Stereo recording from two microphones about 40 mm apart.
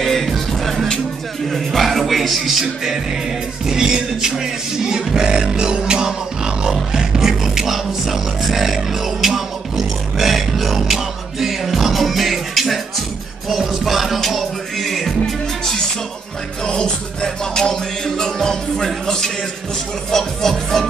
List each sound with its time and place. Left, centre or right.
0.0 s music: centre
6.9 s beatboxing: centre
13.5 s music: centre
16.6 s music: left
20.1 s speech: centre